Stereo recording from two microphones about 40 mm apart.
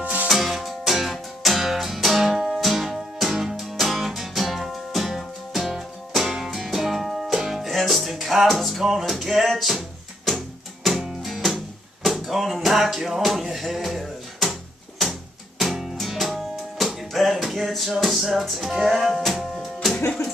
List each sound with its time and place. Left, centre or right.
0.0 s music: right
0.3 s music: centre
10.9 s music: centre